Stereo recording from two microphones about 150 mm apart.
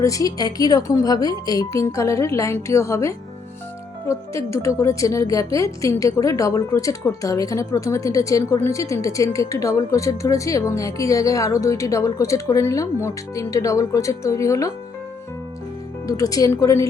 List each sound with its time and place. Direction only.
0.0 s a woman's voice: 20° left (ahead or behind)
16.0 s a woman's voice: 20° left (ahead or behind)